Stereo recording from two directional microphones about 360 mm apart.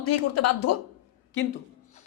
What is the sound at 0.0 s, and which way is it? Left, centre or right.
Speech, left.